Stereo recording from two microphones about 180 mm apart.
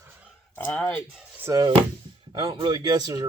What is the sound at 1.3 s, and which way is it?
Speech, 15° right (ahead or behind).